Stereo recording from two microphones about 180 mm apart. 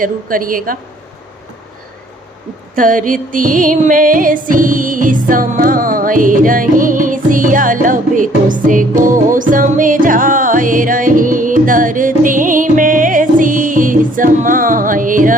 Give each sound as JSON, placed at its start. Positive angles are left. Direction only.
{"t": 0.0, "sound": "a woman's voice", "side_deg": -50}
{"t": 2.7, "sound": "music", "side_deg": -50}